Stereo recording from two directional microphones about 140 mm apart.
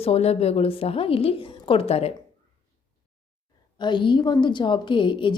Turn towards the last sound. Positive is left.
turn(degrees=35)  # may be behind; listen again after turning